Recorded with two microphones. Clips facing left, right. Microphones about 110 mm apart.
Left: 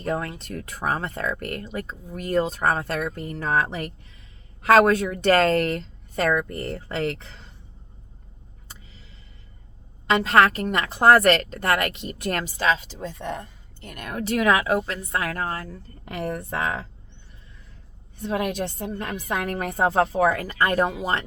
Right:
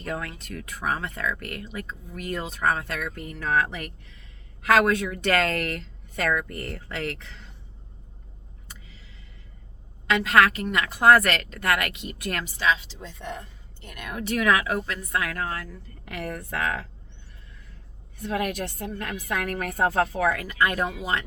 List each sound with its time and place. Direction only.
0.0 s a woman's voice: 35° left (ahead or behind)
10.1 s a woman's voice: 35° left (ahead or behind)
18.2 s a woman's voice: 30° left (ahead or behind)